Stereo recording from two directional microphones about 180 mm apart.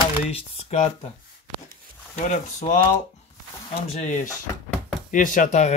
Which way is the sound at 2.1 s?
40° left (ahead or behind).